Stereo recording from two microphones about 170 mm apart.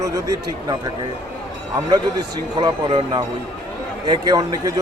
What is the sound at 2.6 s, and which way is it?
A man's voice, 30° right (ahead or behind).